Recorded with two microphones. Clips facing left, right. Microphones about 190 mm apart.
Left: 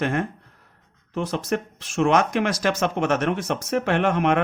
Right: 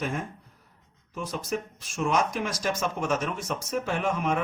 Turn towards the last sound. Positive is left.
turn(degrees=75)  # may be behind; listen again after turning